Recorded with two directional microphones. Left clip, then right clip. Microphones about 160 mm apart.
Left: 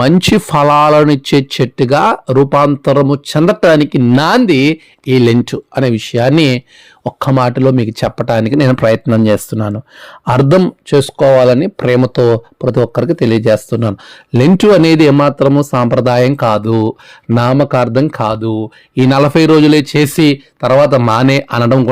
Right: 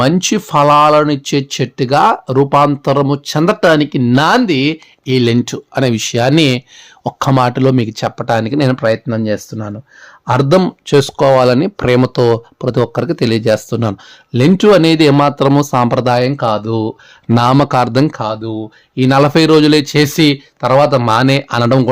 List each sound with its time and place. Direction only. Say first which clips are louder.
0.0 s speech: left 3 dB; 35° left (ahead or behind); by 5.9 s 15° left (ahead or behind)
5.9 s speech: left 2 dB; 5° left (ahead or behind)
7.9 s speech: left 1 dB; 25° left (ahead or behind)
10.6 s speech: even; 5° left (ahead or behind)
14.3 s speech: left 1 dB; 30° left (ahead or behind)
15.1 s speech: left 1 dB; 5° left (ahead or behind)
16.0 s speech: left 2 dB; 35° left (ahead or behind)
17.2 s speech: right 1 dB; 5° right (ahead or behind)
18.2 s speech: left 4 dB; 45° left (ahead or behind)
19.0 s speech: even; 30° left (ahead or behind)
19.3 s speech: left 1 dB; 15° left (ahead or behind); by 21.4 s 35° left (ahead or behind)
21.5 s speech: left 1 dB; 10° left (ahead or behind)